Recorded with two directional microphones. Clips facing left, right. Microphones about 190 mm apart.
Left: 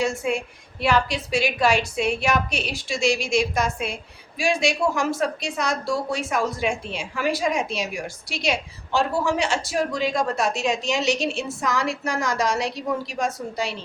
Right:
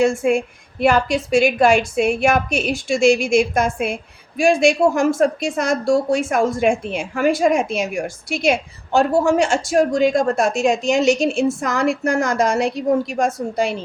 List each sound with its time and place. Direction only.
0.0 s a woman's voice: 50° right (ahead or behind)